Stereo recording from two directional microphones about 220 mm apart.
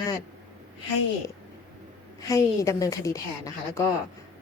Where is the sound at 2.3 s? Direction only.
15° left (ahead or behind).